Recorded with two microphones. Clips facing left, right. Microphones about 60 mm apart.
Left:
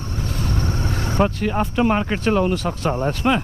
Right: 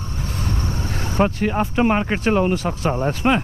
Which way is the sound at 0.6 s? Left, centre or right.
Left.